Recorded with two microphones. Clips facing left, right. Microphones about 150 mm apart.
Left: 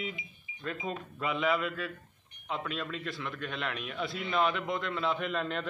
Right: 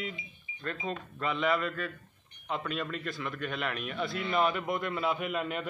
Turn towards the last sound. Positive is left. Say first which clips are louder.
# even
turn(degrees=-10)  # may be behind; listen again after turning